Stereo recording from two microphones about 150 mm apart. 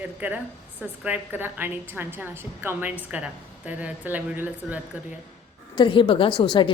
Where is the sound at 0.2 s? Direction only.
10° right (ahead or behind).